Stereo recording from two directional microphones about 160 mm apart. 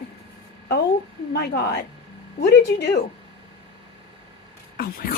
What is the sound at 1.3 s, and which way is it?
Speech, 90° left.